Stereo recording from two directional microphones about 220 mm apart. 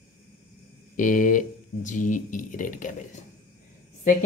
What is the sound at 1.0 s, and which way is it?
Speech, 35° left (ahead or behind).